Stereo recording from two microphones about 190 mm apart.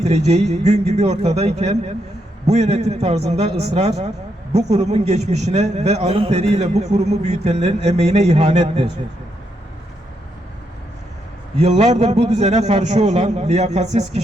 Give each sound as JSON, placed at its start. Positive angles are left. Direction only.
{"t": 0.0, "sound": "a man's voice", "side_deg": -35}
{"t": 11.6, "sound": "a man's voice", "side_deg": -35}